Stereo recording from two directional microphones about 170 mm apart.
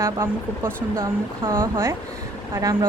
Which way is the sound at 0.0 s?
15° right (ahead or behind).